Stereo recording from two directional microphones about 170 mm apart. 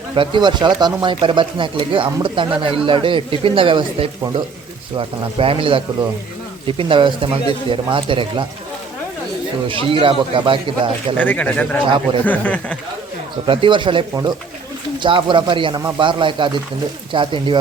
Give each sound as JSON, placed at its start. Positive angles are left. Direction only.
{"t": 0.2, "sound": "speech", "side_deg": -25}
{"t": 9.6, "sound": "speech", "side_deg": -30}
{"t": 11.2, "sound": "speech", "side_deg": 10}
{"t": 13.5, "sound": "speech", "side_deg": -30}